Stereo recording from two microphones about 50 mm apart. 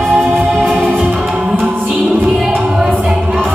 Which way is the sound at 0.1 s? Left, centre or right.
Centre.